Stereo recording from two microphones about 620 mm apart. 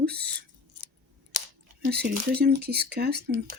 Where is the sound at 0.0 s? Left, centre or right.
Centre.